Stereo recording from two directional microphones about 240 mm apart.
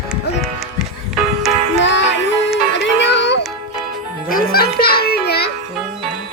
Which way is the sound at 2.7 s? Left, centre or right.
Left.